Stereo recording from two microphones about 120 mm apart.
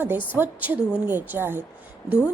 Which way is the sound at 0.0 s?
15° right (ahead or behind).